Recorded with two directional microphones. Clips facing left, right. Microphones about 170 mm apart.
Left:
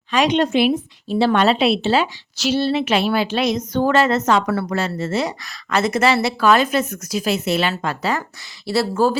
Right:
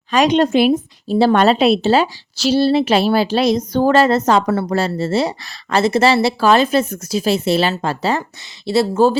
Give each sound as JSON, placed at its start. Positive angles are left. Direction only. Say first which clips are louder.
{"t": 0.1, "sound": "a woman's voice", "louder": "right 3 dB", "side_deg": -40}